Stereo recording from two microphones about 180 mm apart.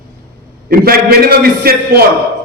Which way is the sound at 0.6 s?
60° right (ahead or behind).